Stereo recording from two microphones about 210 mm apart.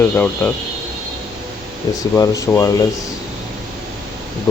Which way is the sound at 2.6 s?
15° left (ahead or behind).